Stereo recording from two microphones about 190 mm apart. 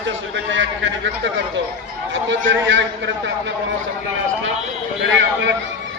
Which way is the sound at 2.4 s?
75° right (ahead or behind).